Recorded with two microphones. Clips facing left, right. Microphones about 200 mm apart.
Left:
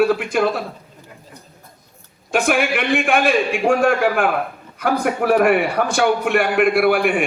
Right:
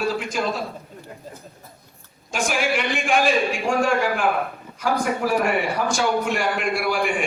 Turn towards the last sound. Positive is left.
turn(degrees=60)  # may be behind; listen again after turning